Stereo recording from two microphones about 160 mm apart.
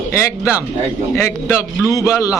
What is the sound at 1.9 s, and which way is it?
Speech, 20° left (ahead or behind).